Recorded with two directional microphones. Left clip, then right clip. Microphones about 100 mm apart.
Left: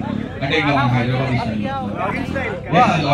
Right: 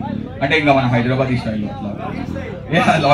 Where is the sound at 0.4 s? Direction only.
30° right (ahead or behind).